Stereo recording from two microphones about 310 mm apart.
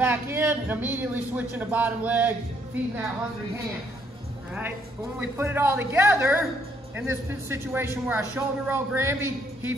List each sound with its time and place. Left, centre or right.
0.0 s a man's voice: centre
5.2 s a man's voice: centre